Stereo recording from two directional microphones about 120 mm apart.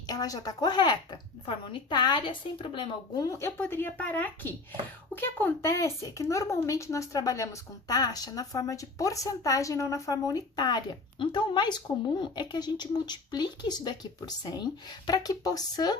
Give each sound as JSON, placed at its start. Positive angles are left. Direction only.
{"t": 0.1, "sound": "speech", "side_deg": 30}
{"t": 3.2, "sound": "speech", "side_deg": 25}